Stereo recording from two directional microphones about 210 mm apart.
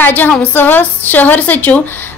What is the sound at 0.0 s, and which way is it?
A woman's voice, 10° left (ahead or behind).